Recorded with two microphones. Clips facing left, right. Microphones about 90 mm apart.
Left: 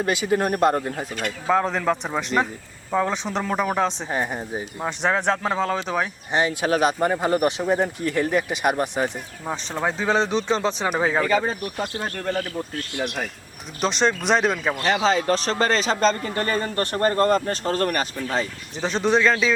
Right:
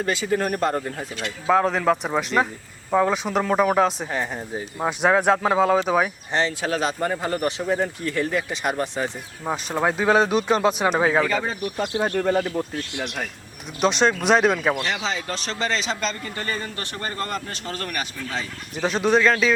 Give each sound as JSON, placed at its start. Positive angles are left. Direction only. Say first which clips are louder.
{"t": 0.0, "sound": "speech", "louder": "left 1 dB", "side_deg": 20}
{"t": 1.5, "sound": "speech", "louder": "right 2 dB", "side_deg": -5}
{"t": 4.1, "sound": "speech", "louder": "left 1 dB", "side_deg": 15}
{"t": 4.8, "sound": "speech", "louder": "right 4 dB", "side_deg": -5}
{"t": 6.3, "sound": "speech", "louder": "left 3 dB", "side_deg": 15}
{"t": 9.5, "sound": "speech", "louder": "right 3 dB", "side_deg": -10}
{"t": 11.6, "sound": "speech", "louder": "right 4 dB", "side_deg": -10}
{"t": 13.8, "sound": "speech", "louder": "right 2 dB", "side_deg": 0}
{"t": 14.8, "sound": "a man's voice", "louder": "left 6 dB", "side_deg": 40}
{"t": 18.8, "sound": "speech", "louder": "right 1 dB", "side_deg": -5}